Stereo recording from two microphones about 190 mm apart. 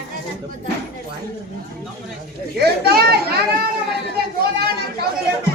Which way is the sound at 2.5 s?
55° right (ahead or behind).